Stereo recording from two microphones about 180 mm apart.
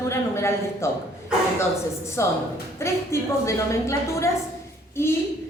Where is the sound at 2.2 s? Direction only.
15° left (ahead or behind).